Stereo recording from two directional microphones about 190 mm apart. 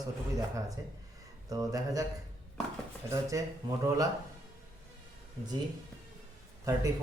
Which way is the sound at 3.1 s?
15° right (ahead or behind).